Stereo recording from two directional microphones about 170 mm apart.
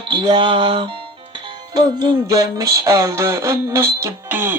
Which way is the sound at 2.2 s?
20° right (ahead or behind).